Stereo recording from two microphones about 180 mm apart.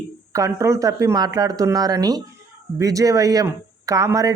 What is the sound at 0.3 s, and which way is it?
Speech, 15° right (ahead or behind).